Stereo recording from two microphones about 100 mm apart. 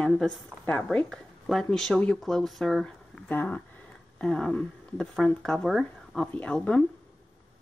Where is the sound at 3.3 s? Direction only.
20° left (ahead or behind).